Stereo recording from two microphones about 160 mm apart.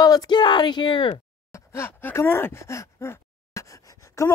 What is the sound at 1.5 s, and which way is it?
Gasp, 15° left (ahead or behind).